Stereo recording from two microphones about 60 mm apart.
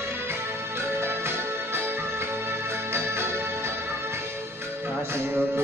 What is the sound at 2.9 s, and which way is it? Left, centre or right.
Music, right.